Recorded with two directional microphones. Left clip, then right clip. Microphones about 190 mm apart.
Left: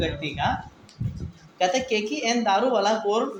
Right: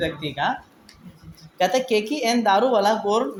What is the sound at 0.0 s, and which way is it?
Speech, 45° right (ahead or behind).